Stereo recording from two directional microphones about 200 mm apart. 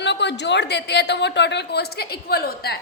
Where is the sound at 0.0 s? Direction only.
60° left (ahead or behind).